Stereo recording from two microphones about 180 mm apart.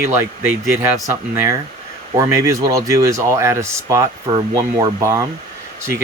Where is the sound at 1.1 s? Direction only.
15° right (ahead or behind).